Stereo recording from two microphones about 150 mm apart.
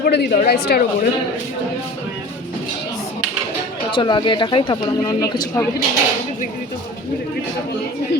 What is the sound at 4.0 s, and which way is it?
Speech, 30° left (ahead or behind).